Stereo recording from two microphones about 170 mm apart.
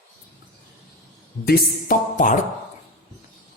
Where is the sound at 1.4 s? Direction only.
55° left (ahead or behind).